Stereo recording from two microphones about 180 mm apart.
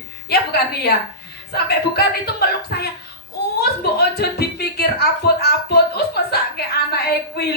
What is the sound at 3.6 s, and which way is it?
Speech, 60° left (ahead or behind).